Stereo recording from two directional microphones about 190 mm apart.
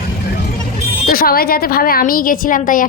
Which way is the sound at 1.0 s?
50° left (ahead or behind).